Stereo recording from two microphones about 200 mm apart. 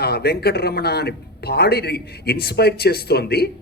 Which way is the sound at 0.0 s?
55° left (ahead or behind).